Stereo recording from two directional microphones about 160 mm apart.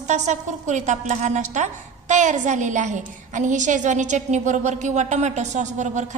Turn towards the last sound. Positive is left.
turn(degrees=-50)  # may be behind; listen again after turning